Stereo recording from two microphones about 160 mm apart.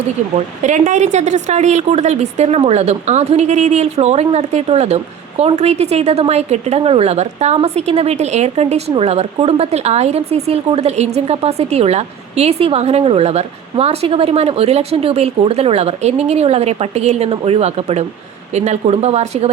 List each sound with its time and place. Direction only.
0.3 s a woman's voice: 50° right (ahead or behind)